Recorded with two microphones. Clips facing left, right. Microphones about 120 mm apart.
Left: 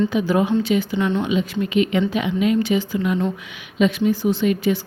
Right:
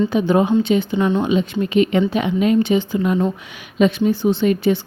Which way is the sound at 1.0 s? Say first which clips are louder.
Right 3 dB; 40° right (ahead or behind).